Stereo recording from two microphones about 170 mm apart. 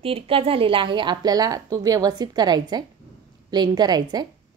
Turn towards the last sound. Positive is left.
turn(degrees=-25)  # may be behind; listen again after turning